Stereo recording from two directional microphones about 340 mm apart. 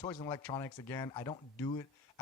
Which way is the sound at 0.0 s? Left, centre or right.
Centre.